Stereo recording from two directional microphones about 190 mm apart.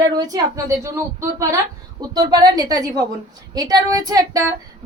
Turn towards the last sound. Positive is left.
turn(degrees=-20)  # may be behind; listen again after turning